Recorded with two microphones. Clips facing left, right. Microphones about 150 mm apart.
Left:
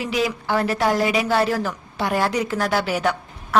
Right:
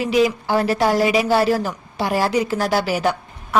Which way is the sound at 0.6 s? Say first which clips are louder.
Right 4 dB; 30° right (ahead or behind).